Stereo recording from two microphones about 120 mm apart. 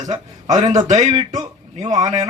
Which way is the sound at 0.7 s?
90° right.